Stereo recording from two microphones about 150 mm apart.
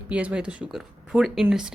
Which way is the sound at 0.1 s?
10° right (ahead or behind).